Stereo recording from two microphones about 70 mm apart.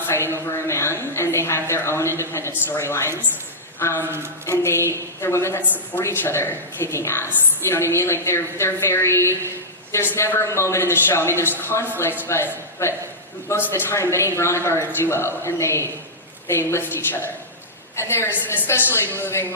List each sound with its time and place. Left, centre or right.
0.0 s a sound: left
0.5 s a woman's voice: left
3.9 s a woman's voice: right
4.4 s a woman's voice: left